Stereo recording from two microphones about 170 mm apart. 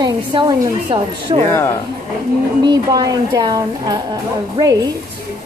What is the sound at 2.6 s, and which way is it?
Speech, 25° right (ahead or behind).